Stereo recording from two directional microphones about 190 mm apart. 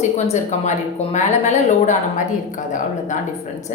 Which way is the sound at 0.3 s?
40° left (ahead or behind).